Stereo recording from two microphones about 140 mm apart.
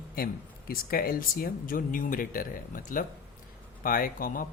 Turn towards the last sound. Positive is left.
turn(degrees=90)